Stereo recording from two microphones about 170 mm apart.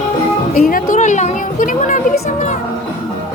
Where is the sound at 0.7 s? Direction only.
45° left (ahead or behind).